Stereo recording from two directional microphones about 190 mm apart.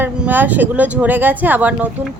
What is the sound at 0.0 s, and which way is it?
Speech, 10° right (ahead or behind).